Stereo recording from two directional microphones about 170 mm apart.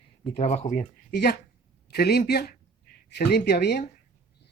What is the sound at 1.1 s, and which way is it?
Speech, 70° left (ahead or behind).